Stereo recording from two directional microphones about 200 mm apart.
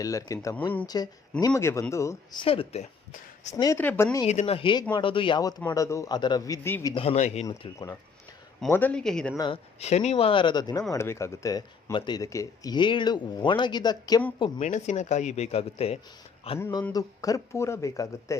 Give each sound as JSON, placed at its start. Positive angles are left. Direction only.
{"t": 0.0, "sound": "speech", "side_deg": 15}
{"t": 3.5, "sound": "speech", "side_deg": 15}
{"t": 4.3, "sound": "speech", "side_deg": 30}
{"t": 6.9, "sound": "speech", "side_deg": 30}
{"t": 7.4, "sound": "speech", "side_deg": 15}
{"t": 9.4, "sound": "speech", "side_deg": 30}
{"t": 14.6, "sound": "speech", "side_deg": 35}
{"t": 16.6, "sound": "speech", "side_deg": 10}